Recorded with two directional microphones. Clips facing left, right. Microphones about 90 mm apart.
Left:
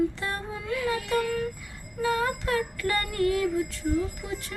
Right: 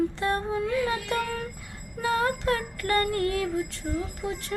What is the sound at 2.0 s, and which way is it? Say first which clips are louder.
Mantra: right 1 dB; 45° right (ahead or behind).